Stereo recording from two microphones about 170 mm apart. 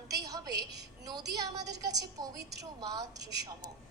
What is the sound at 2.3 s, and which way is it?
Speech, 75° right (ahead or behind).